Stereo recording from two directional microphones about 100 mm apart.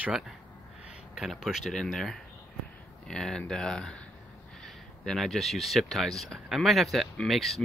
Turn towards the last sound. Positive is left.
turn(degrees=0)  # may be behind; listen again after turning